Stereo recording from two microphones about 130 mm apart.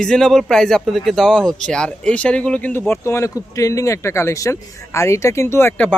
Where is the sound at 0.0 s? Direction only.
5° left (ahead or behind).